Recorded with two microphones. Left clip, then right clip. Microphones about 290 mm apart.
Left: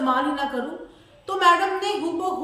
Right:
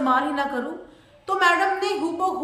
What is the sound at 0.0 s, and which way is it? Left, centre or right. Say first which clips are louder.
A woman's voice: right 1 dB; centre.